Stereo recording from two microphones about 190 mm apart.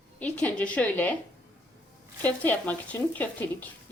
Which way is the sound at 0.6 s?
5° left (ahead or behind).